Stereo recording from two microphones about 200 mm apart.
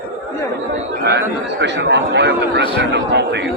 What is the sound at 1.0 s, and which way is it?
Speech, 55° right (ahead or behind).